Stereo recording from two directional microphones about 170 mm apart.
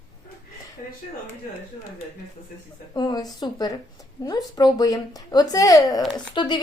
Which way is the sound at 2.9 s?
25° left (ahead or behind).